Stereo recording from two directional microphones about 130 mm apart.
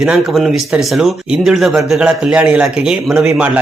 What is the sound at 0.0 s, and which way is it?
Speech, 5° right (ahead or behind).